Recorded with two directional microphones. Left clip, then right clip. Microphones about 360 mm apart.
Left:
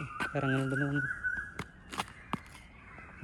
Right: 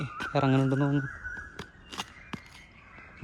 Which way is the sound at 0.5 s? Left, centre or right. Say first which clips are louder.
Right 5 dB; right.